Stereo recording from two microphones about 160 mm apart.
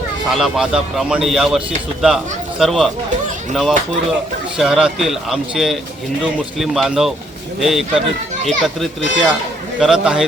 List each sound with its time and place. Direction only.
0.3 s speech: centre (ahead or behind)